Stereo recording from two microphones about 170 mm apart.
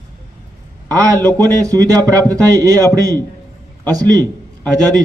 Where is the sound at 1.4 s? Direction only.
20° right (ahead or behind).